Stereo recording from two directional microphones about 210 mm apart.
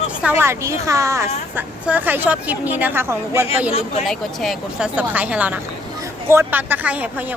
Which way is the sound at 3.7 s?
30° left (ahead or behind).